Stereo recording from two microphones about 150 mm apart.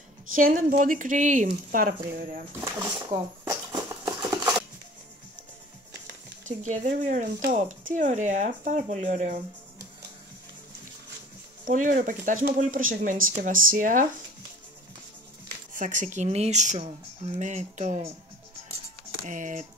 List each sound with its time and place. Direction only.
0.3 s speech: 65° right (ahead or behind)
3.4 s a sound: 25° right (ahead or behind)
6.4 s speech: 55° right (ahead or behind)
11.6 s speech: 60° right (ahead or behind)
15.7 s speech: 60° right (ahead or behind)
19.2 s speech: 60° right (ahead or behind)